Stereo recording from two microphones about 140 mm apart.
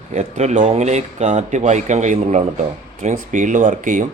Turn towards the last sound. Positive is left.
turn(degrees=-65)  # may be behind; listen again after turning